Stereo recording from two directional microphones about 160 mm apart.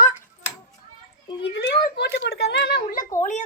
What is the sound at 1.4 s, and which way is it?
A child's voice, 90° left.